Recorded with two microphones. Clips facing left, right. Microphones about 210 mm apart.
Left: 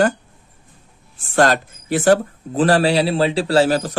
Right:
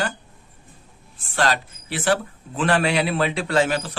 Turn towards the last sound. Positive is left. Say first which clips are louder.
# left 5 dB
turn(degrees=40)  # may be behind; listen again after turning